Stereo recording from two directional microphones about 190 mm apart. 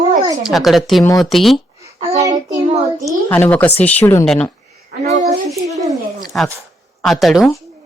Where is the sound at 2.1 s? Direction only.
15° right (ahead or behind).